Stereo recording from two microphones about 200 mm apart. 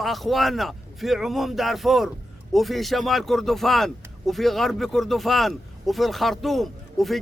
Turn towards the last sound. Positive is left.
turn(degrees=0)  # may be behind; listen again after turning